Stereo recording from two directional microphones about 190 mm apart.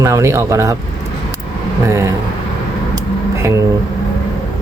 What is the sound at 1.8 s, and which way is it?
Speech, 15° right (ahead or behind).